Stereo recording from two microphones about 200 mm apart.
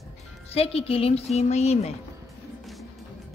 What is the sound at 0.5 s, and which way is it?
A woman's voice, 30° left (ahead or behind).